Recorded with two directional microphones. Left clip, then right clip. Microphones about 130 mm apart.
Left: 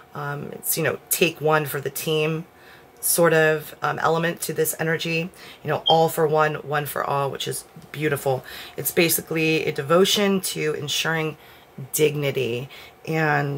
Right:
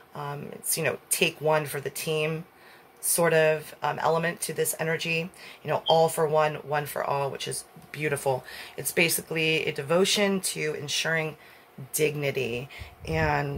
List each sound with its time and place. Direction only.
0.1 s speech: 35° left (ahead or behind)